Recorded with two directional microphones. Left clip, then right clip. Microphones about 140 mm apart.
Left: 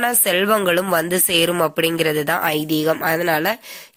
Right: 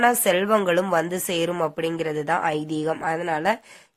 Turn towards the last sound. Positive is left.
turn(degrees=30)  # may be behind; listen again after turning